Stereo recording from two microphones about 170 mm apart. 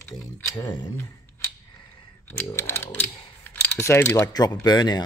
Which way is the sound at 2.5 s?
15° left (ahead or behind).